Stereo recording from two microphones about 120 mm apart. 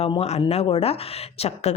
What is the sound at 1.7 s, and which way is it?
Speech, 70° left (ahead or behind).